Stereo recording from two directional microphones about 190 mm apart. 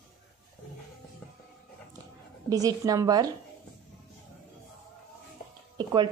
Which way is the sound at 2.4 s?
20° right (ahead or behind).